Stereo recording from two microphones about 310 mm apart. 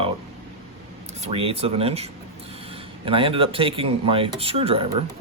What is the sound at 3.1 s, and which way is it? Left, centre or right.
Speech, centre.